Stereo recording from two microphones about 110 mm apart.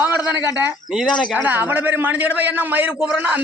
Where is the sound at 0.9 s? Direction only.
5° right (ahead or behind).